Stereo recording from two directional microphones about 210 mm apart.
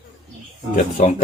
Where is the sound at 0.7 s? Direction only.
35° left (ahead or behind).